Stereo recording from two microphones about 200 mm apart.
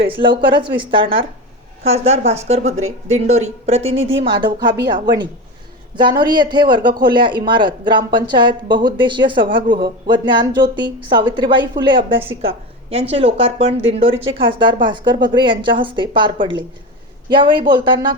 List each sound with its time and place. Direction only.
0.1 s a woman's voice: 25° right (ahead or behind)
3.9 s speech: 75° right (ahead or behind)
4.2 s speech: 25° right (ahead or behind)